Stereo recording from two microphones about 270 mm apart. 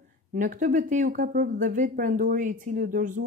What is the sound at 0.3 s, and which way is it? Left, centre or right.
Speech, right.